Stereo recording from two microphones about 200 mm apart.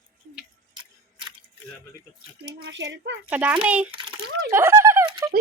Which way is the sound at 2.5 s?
60° right (ahead or behind).